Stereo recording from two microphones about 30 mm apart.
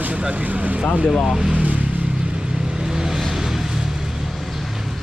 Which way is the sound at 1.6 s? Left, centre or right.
Right.